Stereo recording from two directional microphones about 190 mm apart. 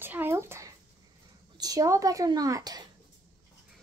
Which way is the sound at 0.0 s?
10° right (ahead or behind).